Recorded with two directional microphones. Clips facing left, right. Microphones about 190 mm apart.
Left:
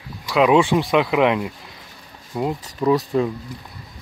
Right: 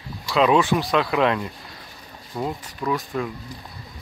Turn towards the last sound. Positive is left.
turn(degrees=30)  # may be behind; listen again after turning